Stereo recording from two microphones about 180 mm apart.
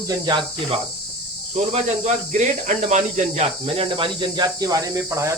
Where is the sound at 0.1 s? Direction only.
25° right (ahead or behind).